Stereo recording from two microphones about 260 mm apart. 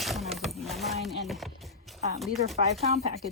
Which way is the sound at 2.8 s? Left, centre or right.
Right.